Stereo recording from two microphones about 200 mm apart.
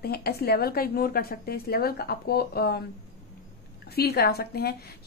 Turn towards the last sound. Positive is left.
turn(degrees=50)  # may be behind; listen again after turning